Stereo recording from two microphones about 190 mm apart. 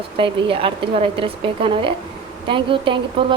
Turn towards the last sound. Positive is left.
turn(degrees=-25)  # may be behind; listen again after turning